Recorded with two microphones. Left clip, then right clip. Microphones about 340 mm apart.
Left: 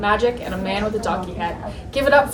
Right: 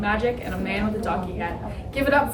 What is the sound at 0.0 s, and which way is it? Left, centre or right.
A woman's voice, centre.